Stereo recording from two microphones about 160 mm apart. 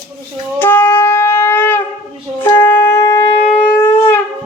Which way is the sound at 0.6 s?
10° left (ahead or behind).